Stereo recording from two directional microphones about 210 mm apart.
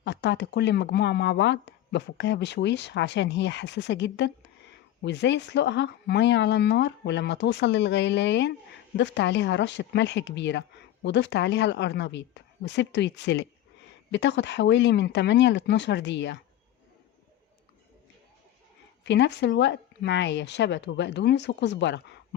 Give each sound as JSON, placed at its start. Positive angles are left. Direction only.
{"t": 0.0, "sound": "speech", "side_deg": 55}
{"t": 19.0, "sound": "speech", "side_deg": 55}